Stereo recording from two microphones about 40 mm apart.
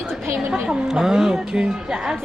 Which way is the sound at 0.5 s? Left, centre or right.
Centre.